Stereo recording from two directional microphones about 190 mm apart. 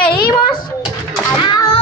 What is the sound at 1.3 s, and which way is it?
Music, 25° left (ahead or behind).